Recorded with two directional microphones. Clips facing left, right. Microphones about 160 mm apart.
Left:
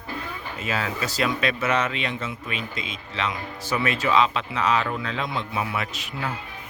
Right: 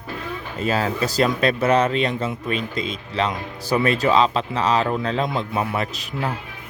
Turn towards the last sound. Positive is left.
turn(degrees=-40)  # may be behind; listen again after turning